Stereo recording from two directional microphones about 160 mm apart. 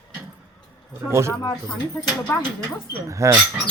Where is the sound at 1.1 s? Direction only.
15° right (ahead or behind).